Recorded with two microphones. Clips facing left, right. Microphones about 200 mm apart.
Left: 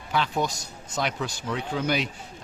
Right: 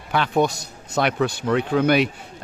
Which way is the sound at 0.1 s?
60° right (ahead or behind).